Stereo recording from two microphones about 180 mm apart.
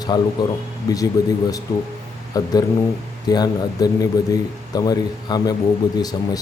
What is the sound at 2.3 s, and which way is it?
Speech, 20° left (ahead or behind).